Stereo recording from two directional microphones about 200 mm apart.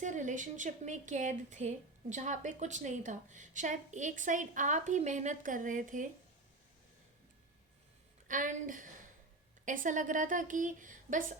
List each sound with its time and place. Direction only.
0.0 s speech: 40° right (ahead or behind)
8.3 s speech: 40° right (ahead or behind)